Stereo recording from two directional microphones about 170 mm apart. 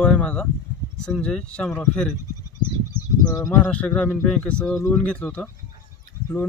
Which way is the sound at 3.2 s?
20° left (ahead or behind).